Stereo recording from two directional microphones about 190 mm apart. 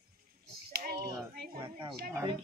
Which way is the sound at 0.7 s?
50° right (ahead or behind).